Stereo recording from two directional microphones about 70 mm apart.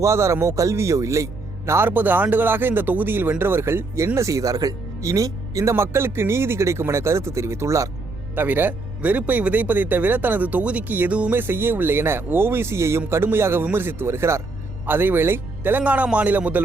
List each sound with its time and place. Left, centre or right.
0.0 s a man's voice: right
1.9 s speech: right
8.4 s speech: right
14.8 s speech: right